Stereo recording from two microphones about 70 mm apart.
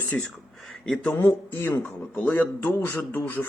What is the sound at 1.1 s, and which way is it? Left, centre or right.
Speech, left.